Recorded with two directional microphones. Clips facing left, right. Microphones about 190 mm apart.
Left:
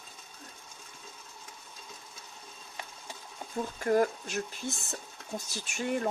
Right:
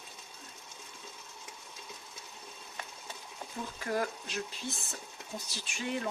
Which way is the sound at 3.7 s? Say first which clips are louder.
Left 8 dB; 45° left (ahead or behind).